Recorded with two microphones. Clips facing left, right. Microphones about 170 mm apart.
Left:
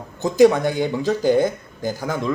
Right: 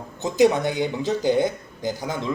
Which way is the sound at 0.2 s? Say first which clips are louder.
Left 4 dB; 20° right (ahead or behind).